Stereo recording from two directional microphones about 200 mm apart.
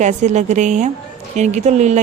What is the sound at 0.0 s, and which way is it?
A woman's voice, 35° right (ahead or behind).